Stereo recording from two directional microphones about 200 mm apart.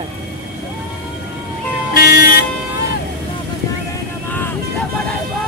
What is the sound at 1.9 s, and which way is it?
Vehicle, 50° left (ahead or behind).